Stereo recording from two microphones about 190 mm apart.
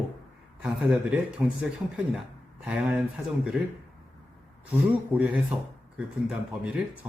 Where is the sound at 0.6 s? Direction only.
5° right (ahead or behind).